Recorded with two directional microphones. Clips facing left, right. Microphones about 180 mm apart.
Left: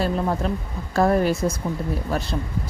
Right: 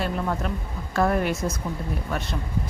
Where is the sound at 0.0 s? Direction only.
30° left (ahead or behind).